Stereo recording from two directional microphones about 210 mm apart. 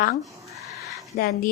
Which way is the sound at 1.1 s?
50° left (ahead or behind).